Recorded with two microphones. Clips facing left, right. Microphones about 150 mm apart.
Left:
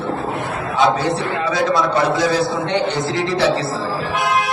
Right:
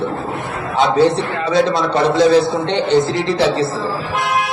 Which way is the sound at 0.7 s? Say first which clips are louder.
Right 4 dB; 25° right (ahead or behind).